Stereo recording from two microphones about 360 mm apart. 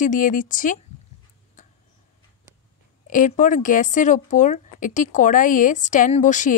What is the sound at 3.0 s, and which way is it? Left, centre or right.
A woman's voice, left.